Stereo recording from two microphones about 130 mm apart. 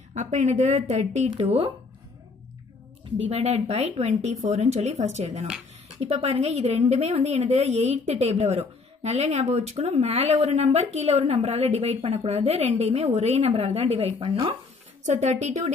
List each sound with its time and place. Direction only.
0.1 s speech: 65° right (ahead or behind)
1.3 s speech: 40° right (ahead or behind)
3.3 s speech: 55° right (ahead or behind)